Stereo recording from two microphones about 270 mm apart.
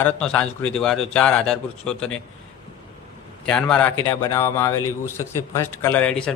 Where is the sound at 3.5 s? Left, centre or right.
Centre.